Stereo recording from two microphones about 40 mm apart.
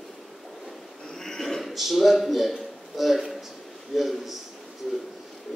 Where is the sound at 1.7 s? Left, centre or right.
Centre.